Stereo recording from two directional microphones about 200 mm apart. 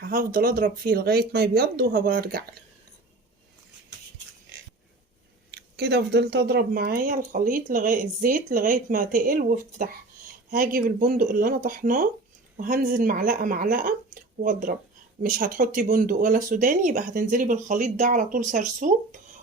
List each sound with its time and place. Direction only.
0.0 s speech: 45° right (ahead or behind)
5.5 s speech: 55° right (ahead or behind); by 19.2 s 40° right (ahead or behind)